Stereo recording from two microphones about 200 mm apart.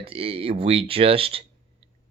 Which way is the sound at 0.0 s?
30° right (ahead or behind).